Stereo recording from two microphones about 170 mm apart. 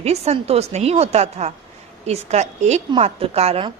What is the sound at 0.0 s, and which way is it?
A woman's voice, 40° right (ahead or behind).